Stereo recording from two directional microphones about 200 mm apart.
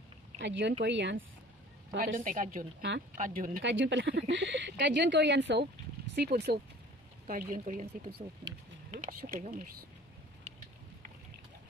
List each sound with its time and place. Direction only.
0.4 s speech: 65° right (ahead or behind)
2.1 s speech: 40° right (ahead or behind)
3.6 s speech: 65° right (ahead or behind)
7.2 s speech: 40° right (ahead or behind)